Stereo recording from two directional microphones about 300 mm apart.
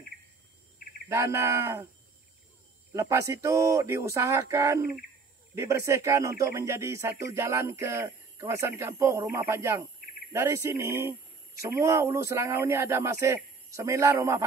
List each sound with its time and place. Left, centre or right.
1.0 s speech: centre
2.9 s speech: centre